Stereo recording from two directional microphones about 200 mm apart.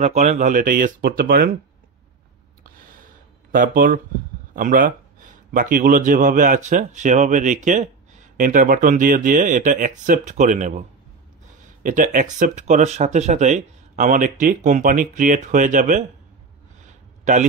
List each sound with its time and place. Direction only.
0.0 s speech: 35° right (ahead or behind)
3.5 s speech: 45° right (ahead or behind)
11.8 s speech: 40° right (ahead or behind)
17.2 s a sound: 40° right (ahead or behind)